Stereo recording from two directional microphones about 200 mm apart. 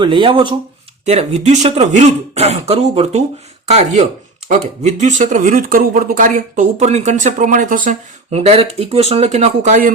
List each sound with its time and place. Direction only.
0.0 s speech: 25° right (ahead or behind)